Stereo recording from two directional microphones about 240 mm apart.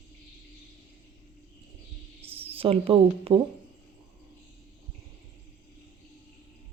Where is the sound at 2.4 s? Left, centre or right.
Right.